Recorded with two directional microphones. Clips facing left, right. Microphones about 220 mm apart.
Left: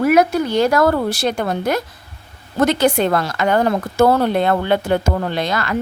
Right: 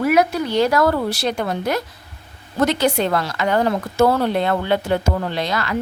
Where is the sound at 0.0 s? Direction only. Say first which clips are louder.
Left 3 dB; 50° left (ahead or behind).